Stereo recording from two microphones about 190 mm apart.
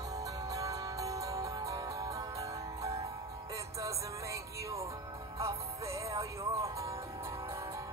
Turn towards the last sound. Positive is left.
turn(degrees=-15)  # may be behind; listen again after turning